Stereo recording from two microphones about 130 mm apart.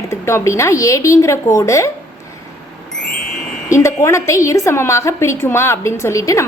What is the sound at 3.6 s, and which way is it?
A woman's voice, 25° left (ahead or behind).